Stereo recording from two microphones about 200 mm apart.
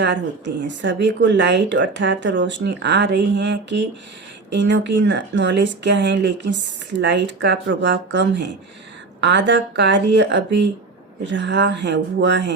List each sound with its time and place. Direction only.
0.0 s speech: 65° right (ahead or behind)